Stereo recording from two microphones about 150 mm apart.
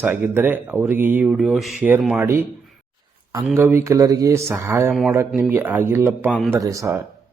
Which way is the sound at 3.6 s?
20° right (ahead or behind).